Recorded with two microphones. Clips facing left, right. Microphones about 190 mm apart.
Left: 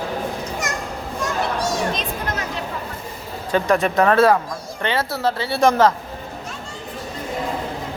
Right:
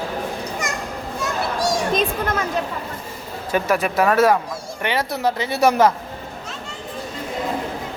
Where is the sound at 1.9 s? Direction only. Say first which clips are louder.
Right 5 dB; 50° right (ahead or behind).